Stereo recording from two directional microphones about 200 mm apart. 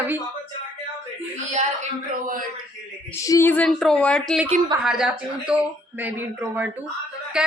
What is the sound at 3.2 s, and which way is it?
A woman's voice, 15° left (ahead or behind).